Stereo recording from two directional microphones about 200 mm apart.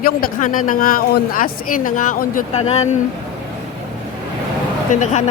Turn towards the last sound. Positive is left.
turn(degrees=35)  # may be behind; listen again after turning